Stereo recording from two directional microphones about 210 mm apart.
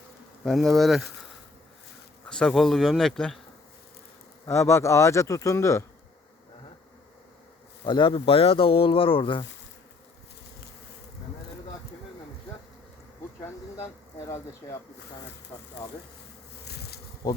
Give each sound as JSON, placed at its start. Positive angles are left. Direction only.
{"t": 0.4, "sound": "speech", "side_deg": 0}
{"t": 2.2, "sound": "speech", "side_deg": 5}
{"t": 4.4, "sound": "speech", "side_deg": 10}
{"t": 7.9, "sound": "speech", "side_deg": 20}
{"t": 14.3, "sound": "speech", "side_deg": 15}
{"t": 16.6, "sound": "bee", "side_deg": 50}
{"t": 17.2, "sound": "bee", "side_deg": 20}